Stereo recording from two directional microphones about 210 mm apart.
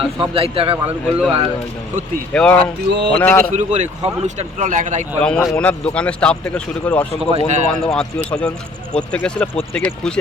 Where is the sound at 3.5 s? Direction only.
35° right (ahead or behind).